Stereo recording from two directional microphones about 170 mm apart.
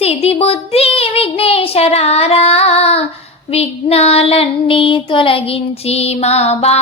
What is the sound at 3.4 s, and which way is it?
Child singing, 35° left (ahead or behind).